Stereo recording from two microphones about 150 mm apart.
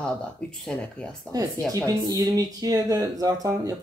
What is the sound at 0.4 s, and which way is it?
Speech, 5° left (ahead or behind).